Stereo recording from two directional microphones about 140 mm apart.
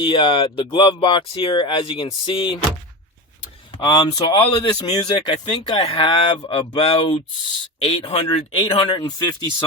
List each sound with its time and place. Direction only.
0.0 s speech: 35° left (ahead or behind)
3.8 s speech: 35° left (ahead or behind)
8.6 s speech: 30° left (ahead or behind)